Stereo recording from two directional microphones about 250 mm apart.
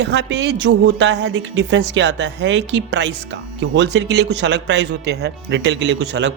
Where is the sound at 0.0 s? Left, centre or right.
Right.